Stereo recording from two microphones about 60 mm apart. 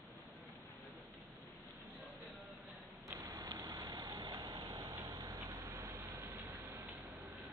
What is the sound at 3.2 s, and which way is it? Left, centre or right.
Vehicle, right.